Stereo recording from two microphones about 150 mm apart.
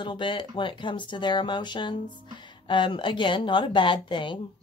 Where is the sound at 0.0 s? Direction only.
30° left (ahead or behind).